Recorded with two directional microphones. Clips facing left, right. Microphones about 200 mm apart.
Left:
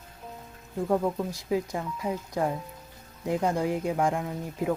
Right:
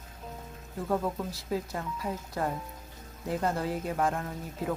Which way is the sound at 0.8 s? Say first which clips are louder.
Left 4 dB; 15° left (ahead or behind).